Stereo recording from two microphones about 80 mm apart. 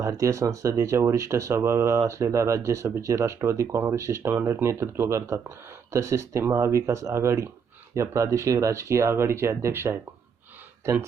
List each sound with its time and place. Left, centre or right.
0.0 s speech: right